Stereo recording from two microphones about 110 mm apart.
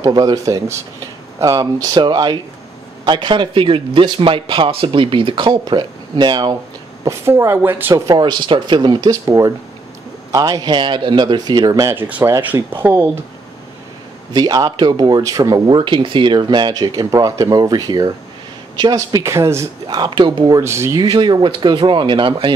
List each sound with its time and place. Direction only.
0.0 s speech: 40° right (ahead or behind)
7.1 s speech: 25° right (ahead or behind)
8.1 s speech: 45° right (ahead or behind)
9.1 s speech: 30° right (ahead or behind)
14.3 s speech: 40° right (ahead or behind)
19.9 s speech: 45° right (ahead or behind)
20.5 s speech: 25° right (ahead or behind)
21.0 s speech: 40° right (ahead or behind)